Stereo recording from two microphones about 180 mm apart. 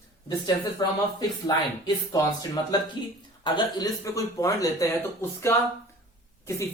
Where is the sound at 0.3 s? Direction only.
20° left (ahead or behind).